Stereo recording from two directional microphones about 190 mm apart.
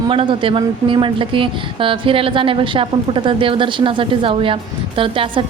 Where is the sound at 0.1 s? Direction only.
25° right (ahead or behind).